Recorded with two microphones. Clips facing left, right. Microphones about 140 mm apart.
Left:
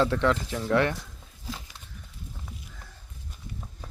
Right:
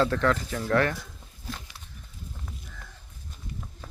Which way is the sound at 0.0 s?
20° left (ahead or behind).